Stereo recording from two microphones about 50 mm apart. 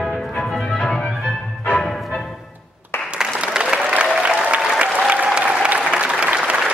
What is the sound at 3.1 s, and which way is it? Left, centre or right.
Applause, centre.